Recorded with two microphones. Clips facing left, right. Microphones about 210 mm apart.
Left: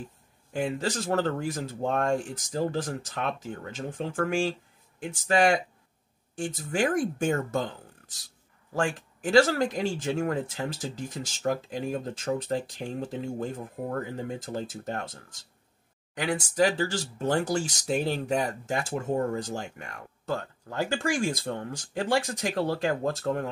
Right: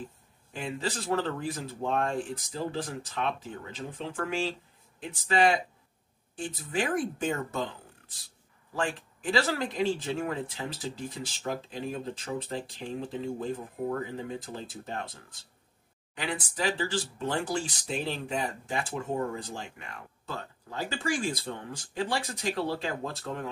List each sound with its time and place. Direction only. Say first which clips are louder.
0.5 s speech: left 5 dB; 45° left (ahead or behind)
6.3 s speech: left 2 dB; 45° left (ahead or behind)